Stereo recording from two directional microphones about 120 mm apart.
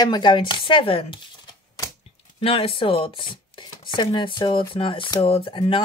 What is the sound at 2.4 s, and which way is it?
A woman's voice, 50° left (ahead or behind).